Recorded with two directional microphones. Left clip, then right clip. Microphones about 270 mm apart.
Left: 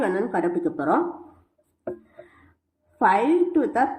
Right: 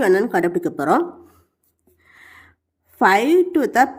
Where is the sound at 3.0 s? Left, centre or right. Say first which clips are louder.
Right 4 dB; right.